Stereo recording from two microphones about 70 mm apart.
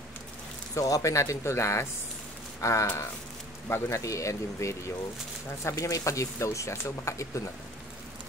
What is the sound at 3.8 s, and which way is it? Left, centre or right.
Speech, left.